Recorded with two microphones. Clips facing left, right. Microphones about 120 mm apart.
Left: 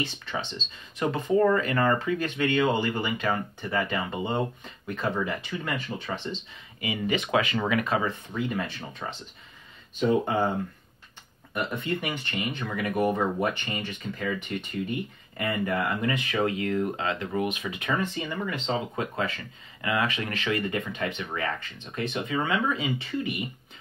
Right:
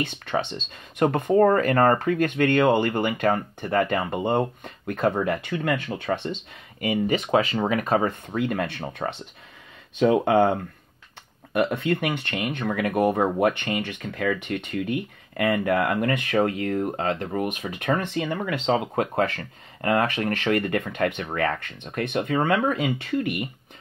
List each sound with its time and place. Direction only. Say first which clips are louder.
0.0 s speech: right 6 dB; 55° right (ahead or behind)
8.4 s speech: right 5 dB; 65° right (ahead or behind)
9.9 s speech: right 6 dB; 70° right (ahead or behind); by 18.0 s 45° right (ahead or behind)
18.0 s speech: right 4 dB; 65° right (ahead or behind)